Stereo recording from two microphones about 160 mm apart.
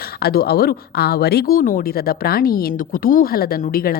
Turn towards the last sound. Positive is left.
turn(degrees=65)  # may be behind; listen again after turning